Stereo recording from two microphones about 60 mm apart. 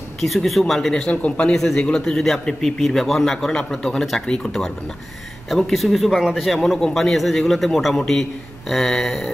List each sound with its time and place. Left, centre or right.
0.2 s a man's voice: centre
1.1 s speech: left
1.5 s a man's voice: centre